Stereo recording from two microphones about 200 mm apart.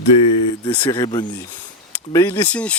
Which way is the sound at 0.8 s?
25° left (ahead or behind).